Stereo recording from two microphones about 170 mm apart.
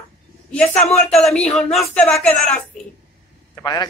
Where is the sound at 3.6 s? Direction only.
25° left (ahead or behind).